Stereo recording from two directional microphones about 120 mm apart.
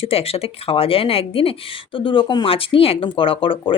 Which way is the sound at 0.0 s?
55° left (ahead or behind).